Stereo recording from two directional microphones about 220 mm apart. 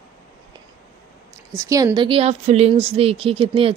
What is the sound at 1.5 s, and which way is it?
A woman's voice, 15° right (ahead or behind).